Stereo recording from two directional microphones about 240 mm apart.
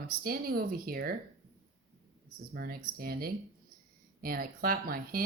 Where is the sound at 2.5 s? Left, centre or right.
Right.